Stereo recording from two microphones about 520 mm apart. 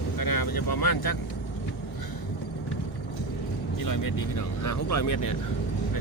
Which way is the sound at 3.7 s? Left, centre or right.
Left.